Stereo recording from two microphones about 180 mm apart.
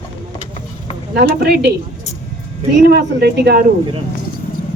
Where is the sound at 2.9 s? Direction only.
65° right (ahead or behind).